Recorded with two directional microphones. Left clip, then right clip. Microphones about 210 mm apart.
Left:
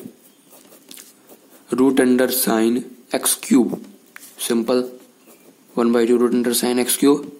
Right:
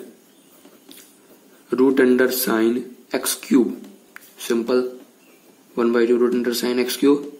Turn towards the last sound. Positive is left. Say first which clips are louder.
# left 1 dB
turn(degrees=35)  # may be behind; listen again after turning